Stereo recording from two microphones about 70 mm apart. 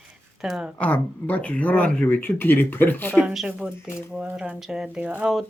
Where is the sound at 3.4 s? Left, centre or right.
Centre.